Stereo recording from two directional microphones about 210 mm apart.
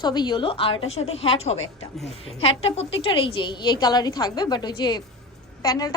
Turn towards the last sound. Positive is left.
turn(degrees=15)  # may be behind; listen again after turning